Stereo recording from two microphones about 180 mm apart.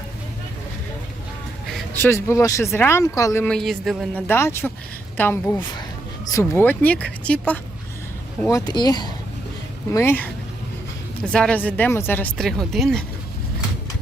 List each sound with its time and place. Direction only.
2.0 s speech: 15° left (ahead or behind)
3.4 s speech: 5° left (ahead or behind)
4.3 s speech: 15° left (ahead or behind)
8.4 s speech: 20° left (ahead or behind); by 13.1 s centre (ahead or behind)